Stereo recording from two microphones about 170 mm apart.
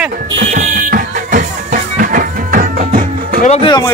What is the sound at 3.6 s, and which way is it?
Speech, 25° left (ahead or behind).